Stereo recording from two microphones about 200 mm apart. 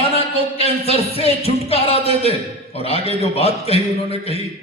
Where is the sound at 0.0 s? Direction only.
30° left (ahead or behind).